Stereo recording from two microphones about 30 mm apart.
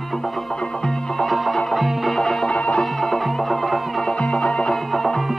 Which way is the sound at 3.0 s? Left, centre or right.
Centre.